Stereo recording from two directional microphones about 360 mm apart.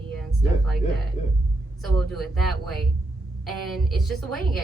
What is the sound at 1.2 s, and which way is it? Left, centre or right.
Speech, centre.